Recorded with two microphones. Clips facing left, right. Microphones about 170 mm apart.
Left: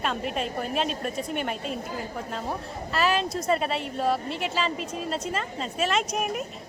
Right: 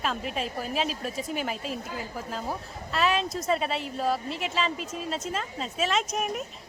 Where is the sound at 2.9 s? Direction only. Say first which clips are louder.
Left 1 dB; centre (ahead or behind).